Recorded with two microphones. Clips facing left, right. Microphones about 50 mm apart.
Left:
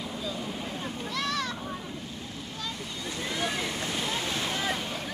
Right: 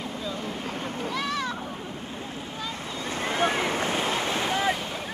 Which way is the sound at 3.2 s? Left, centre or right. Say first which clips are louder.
Right 6 dB; right.